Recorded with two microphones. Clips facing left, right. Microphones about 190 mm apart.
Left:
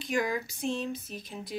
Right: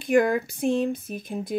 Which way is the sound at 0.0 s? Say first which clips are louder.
Right 10 dB; 55° right (ahead or behind).